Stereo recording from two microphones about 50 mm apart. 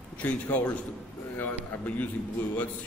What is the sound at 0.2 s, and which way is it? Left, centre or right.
A man's voice, left.